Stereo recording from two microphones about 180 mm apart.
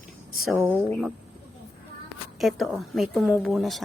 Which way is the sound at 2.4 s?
Centre (ahead or behind).